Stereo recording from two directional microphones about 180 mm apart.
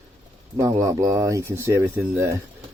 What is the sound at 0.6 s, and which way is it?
Speech, 20° right (ahead or behind).